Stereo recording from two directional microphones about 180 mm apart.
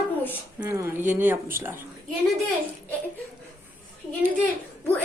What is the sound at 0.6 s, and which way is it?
Speech, 10° right (ahead or behind).